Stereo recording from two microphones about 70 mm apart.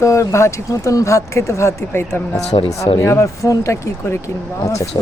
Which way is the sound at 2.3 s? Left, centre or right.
Left.